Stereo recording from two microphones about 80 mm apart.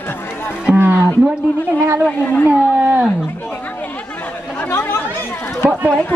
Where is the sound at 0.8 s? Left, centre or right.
Right.